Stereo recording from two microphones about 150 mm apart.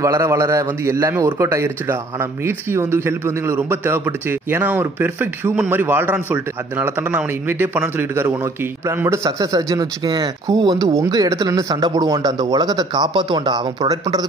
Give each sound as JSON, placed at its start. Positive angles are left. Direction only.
{"t": 0.0, "sound": "a man's voice", "side_deg": -20}